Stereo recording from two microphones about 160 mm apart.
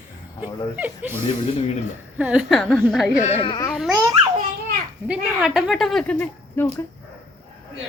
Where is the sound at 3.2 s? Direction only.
35° left (ahead or behind).